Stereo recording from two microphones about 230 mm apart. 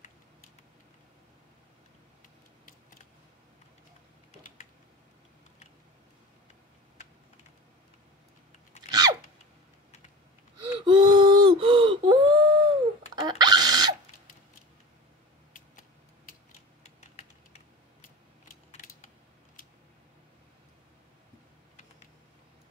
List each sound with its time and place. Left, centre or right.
8.8 s chewing: left
10.7 s a sound: centre
16.8 s typing: left
18.7 s typing: left